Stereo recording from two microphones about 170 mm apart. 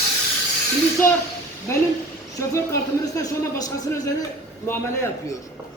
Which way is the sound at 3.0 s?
20° left (ahead or behind).